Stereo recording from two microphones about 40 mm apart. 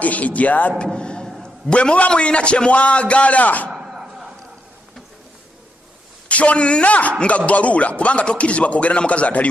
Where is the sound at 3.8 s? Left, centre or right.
Centre.